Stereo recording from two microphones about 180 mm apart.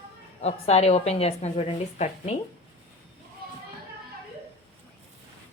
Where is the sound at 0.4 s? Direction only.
35° left (ahead or behind).